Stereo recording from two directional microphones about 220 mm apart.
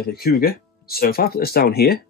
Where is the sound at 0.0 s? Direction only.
45° left (ahead or behind).